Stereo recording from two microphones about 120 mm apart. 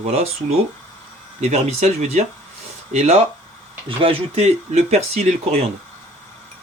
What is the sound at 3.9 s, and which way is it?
Speech, 55° right (ahead or behind).